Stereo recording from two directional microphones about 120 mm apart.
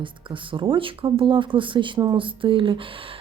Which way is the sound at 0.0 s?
45° right (ahead or behind).